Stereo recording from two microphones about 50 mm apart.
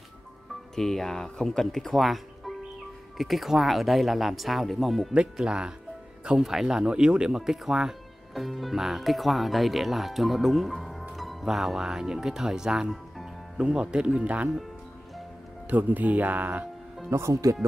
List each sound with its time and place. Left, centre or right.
0.7 s speech: centre
5.1 s speech: centre
13.6 s speech: centre
15.7 s speech: right
17.1 s speech: right